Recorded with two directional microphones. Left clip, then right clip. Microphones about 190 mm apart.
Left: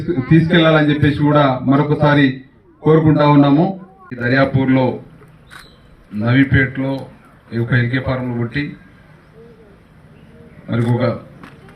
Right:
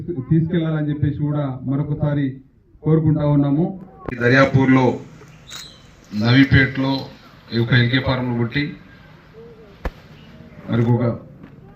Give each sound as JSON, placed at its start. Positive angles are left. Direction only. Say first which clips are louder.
{"t": 0.1, "sound": "a man's voice", "louder": "left 8 dB", "side_deg": 40}
{"t": 6.1, "sound": "a man's voice", "louder": "even", "side_deg": 25}
{"t": 10.7, "sound": "a man's voice", "louder": "left 3 dB", "side_deg": 35}